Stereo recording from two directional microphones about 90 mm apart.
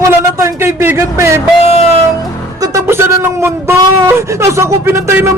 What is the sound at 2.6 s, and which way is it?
Music, 40° right (ahead or behind).